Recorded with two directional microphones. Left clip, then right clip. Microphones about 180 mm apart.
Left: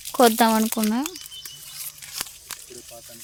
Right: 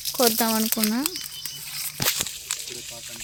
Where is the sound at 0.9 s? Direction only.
5° left (ahead or behind).